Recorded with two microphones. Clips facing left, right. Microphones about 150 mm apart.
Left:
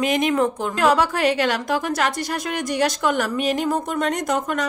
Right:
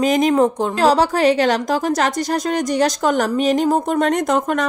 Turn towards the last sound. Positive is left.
turn(degrees=-50)  # may be behind; listen again after turning